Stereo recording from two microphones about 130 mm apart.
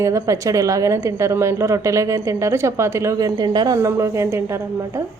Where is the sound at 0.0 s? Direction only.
25° right (ahead or behind).